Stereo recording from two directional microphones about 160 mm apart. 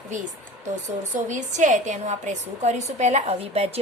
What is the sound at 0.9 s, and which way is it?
A woman's voice, 50° right (ahead or behind).